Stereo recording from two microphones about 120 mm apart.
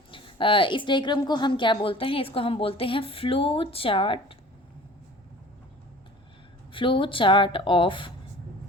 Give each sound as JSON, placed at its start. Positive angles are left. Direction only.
{"t": 0.1, "sound": "a woman's voice", "side_deg": 45}
{"t": 6.7, "sound": "a woman's voice", "side_deg": 45}